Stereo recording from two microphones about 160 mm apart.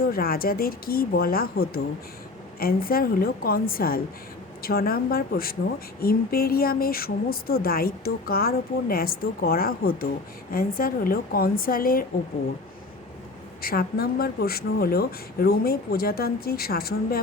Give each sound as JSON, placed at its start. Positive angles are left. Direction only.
{"t": 0.0, "sound": "speech", "side_deg": 70}
{"t": 13.6, "sound": "speech", "side_deg": 70}